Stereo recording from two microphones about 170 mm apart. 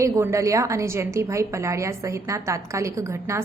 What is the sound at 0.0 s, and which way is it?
A woman's voice, 15° right (ahead or behind).